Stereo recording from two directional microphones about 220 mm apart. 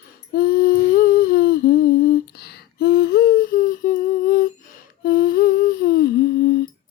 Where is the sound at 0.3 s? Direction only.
40° left (ahead or behind).